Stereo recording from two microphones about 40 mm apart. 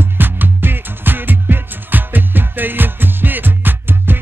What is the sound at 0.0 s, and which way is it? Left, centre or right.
Music, right.